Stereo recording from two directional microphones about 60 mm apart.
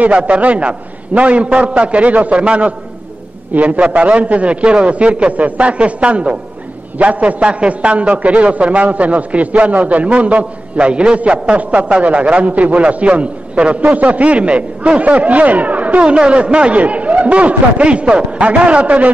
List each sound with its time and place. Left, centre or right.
0.0 s a man's voice: right